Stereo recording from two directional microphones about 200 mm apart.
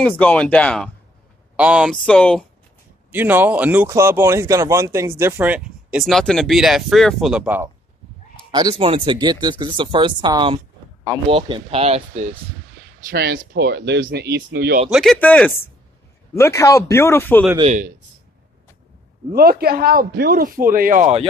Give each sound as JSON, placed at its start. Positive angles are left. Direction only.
{"t": 0.0, "sound": "speech", "side_deg": 5}
{"t": 1.6, "sound": "speech", "side_deg": -5}
{"t": 2.0, "sound": "speech", "side_deg": 5}
{"t": 3.1, "sound": "speech", "side_deg": -10}
{"t": 8.5, "sound": "speech", "side_deg": -20}
{"t": 13.1, "sound": "speech", "side_deg": -55}
{"t": 14.9, "sound": "speech", "side_deg": 0}
{"t": 17.6, "sound": "speech", "side_deg": -35}
{"t": 19.3, "sound": "speech", "side_deg": -50}